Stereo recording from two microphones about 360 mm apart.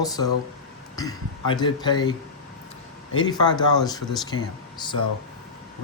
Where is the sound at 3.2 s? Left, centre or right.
Centre.